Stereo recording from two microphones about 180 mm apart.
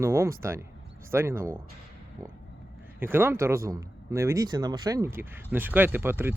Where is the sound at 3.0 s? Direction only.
10° right (ahead or behind).